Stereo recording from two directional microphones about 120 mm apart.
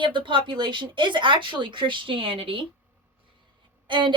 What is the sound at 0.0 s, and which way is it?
Speech, 40° right (ahead or behind).